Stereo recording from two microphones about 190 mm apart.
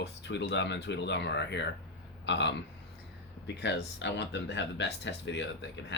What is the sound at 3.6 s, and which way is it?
Speech, 65° left (ahead or behind).